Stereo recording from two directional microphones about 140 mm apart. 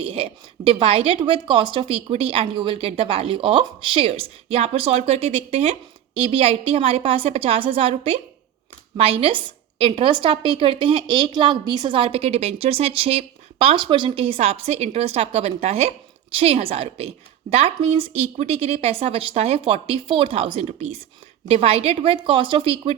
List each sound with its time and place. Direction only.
0.0 s a woman's voice: 40° right (ahead or behind)